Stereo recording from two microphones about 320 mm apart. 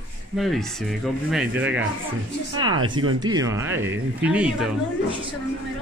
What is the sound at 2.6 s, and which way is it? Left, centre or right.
Speech, right.